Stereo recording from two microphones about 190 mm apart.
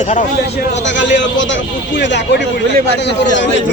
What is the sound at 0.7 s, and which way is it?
A man's voice, 70° left (ahead or behind).